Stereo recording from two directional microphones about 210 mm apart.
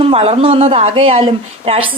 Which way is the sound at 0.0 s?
30° right (ahead or behind).